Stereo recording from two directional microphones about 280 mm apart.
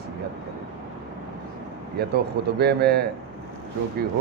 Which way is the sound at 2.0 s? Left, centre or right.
Right.